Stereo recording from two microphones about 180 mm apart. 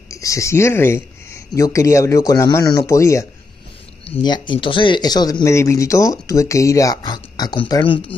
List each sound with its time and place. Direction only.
0.1 s speech: 15° left (ahead or behind)
4.0 s speech: 30° left (ahead or behind)